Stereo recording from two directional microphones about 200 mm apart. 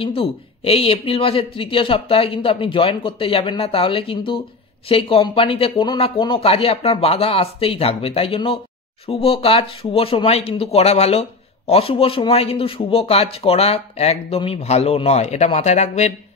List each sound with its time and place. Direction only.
0.0 s speech: 25° left (ahead or behind)